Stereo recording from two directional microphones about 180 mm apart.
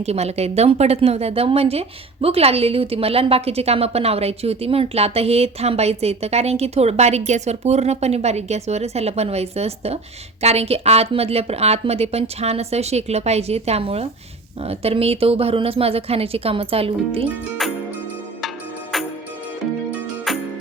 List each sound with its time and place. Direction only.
0.0 s a woman's voice: 35° right (ahead or behind)
17.6 s music: centre (ahead or behind)